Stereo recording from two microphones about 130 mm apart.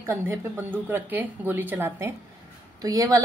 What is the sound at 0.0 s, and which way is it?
A woman's voice, 15° right (ahead or behind).